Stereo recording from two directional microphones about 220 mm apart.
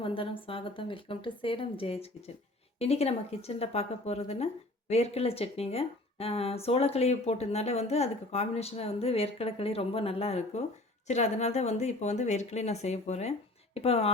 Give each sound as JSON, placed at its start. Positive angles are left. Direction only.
{"t": 0.0, "sound": "speech", "side_deg": 25}